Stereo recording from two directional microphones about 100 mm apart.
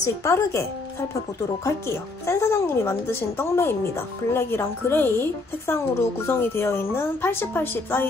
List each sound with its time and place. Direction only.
0.0 s speech: 35° left (ahead or behind)
2.2 s a woman's voice: 25° left (ahead or behind)